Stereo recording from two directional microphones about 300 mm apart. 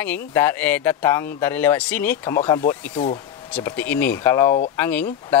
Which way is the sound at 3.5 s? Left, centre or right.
Centre.